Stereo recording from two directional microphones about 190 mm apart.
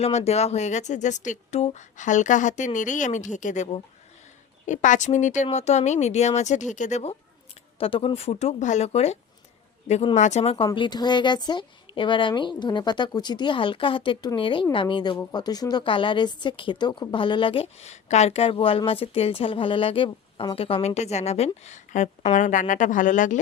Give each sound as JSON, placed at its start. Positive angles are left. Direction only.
{"t": 0.0, "sound": "a woman's voice", "side_deg": 35}